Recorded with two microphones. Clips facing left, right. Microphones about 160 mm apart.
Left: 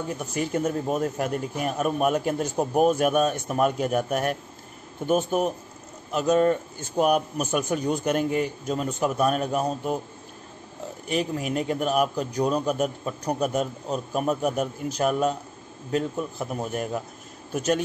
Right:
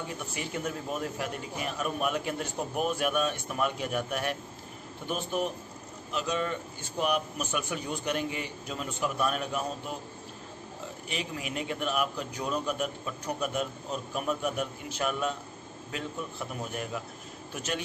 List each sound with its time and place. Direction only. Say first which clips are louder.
0.2 s a man's voice: left 11 dB; 45° left (ahead or behind)
11.1 s a man's voice: left 10 dB; 45° left (ahead or behind)